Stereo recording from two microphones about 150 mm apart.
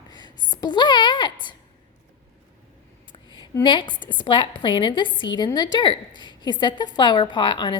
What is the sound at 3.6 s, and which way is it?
A woman's voice, 35° left (ahead or behind).